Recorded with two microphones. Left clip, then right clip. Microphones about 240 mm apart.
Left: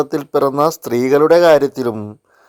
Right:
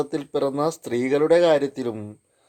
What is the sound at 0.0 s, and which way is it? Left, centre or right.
A man's voice, left.